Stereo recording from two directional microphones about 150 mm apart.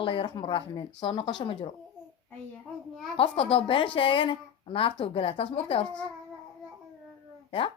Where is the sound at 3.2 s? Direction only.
35° left (ahead or behind).